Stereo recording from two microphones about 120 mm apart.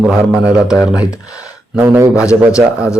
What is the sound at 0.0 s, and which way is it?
Speech, 5° right (ahead or behind).